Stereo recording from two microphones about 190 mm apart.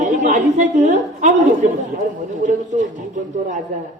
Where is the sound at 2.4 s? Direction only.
40° right (ahead or behind).